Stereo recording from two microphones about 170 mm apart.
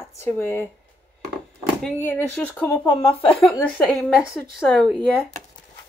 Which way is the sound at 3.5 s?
5° left (ahead or behind).